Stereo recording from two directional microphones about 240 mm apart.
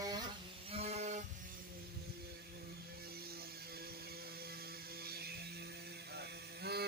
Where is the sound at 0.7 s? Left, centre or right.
Right.